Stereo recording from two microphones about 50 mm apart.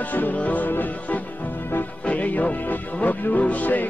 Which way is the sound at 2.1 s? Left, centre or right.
Left.